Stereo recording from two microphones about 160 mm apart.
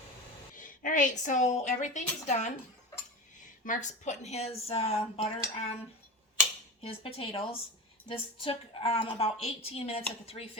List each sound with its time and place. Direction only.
0.5 s a woman's voice: 55° left (ahead or behind)
3.6 s a woman's voice: 50° left (ahead or behind)
6.8 s a woman's voice: 35° left (ahead or behind)